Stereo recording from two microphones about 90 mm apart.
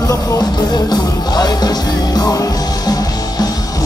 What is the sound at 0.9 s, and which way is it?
Music, 50° left (ahead or behind).